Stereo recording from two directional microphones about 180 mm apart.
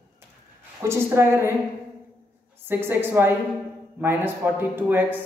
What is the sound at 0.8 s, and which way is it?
Speech, 15° right (ahead or behind).